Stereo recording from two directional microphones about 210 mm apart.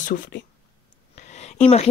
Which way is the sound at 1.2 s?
30° left (ahead or behind).